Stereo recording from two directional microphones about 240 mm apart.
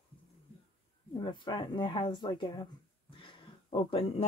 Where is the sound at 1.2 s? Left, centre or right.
Centre.